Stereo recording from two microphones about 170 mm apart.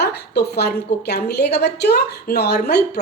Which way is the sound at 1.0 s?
70° left (ahead or behind).